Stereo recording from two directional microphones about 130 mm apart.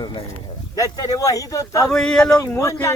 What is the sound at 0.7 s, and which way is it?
Speech, 25° left (ahead or behind).